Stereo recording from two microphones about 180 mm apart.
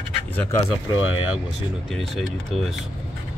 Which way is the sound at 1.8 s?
Centre (ahead or behind).